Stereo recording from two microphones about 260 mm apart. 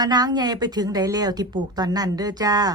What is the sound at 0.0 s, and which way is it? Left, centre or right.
Speech, centre.